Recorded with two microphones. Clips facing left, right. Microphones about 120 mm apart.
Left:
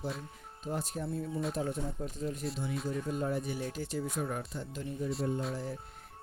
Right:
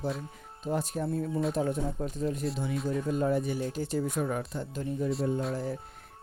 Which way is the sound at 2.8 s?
90° right.